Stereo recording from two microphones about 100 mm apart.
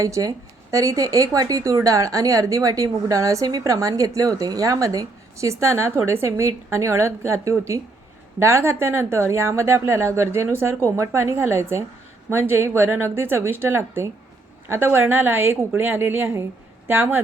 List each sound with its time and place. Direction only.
0.0 s a woman's voice: 35° right (ahead or behind); by 17.2 s 20° right (ahead or behind)